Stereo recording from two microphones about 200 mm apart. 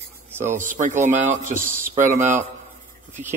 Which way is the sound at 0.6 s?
40° right (ahead or behind).